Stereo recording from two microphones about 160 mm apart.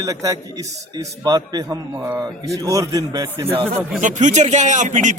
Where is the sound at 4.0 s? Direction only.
50° right (ahead or behind).